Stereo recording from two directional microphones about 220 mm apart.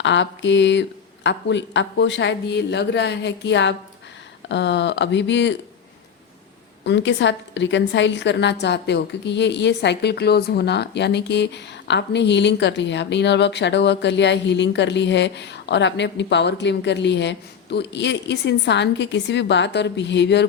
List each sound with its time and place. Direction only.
0.0 s a woman's voice: 55° left (ahead or behind)
6.8 s a woman's voice: 55° left (ahead or behind)